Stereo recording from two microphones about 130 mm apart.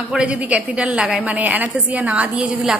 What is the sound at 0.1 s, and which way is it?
A woman's voice, 10° right (ahead or behind).